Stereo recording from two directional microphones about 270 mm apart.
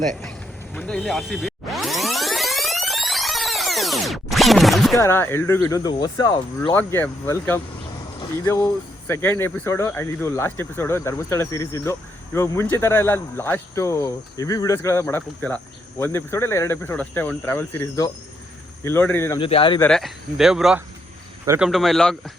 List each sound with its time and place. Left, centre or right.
0.2 s a sound: centre
4.9 s speech: centre
19.4 s speech: centre
19.8 s speech: centre
21.7 s speech: centre